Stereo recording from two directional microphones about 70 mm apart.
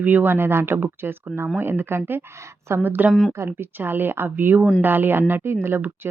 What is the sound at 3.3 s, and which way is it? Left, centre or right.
Speech, right.